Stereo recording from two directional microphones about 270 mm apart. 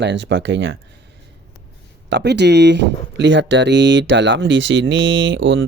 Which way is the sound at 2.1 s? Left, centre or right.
Right.